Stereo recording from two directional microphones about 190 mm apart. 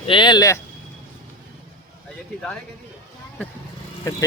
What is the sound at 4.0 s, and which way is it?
Speech, 15° left (ahead or behind).